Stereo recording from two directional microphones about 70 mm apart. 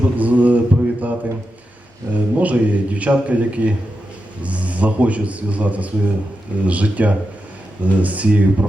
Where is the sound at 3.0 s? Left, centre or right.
Centre.